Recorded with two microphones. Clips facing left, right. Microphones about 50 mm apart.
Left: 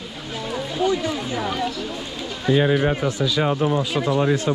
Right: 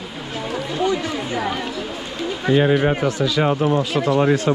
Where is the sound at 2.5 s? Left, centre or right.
Right.